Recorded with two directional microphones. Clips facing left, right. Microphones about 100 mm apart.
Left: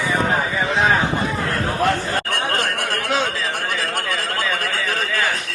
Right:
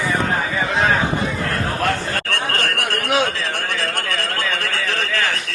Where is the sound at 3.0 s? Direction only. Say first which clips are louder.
Right 3 dB; 15° right (ahead or behind).